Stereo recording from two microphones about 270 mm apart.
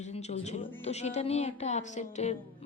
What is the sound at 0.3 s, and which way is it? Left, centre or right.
A woman's voice, left.